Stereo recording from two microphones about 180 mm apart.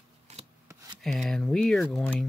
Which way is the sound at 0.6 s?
20° right (ahead or behind).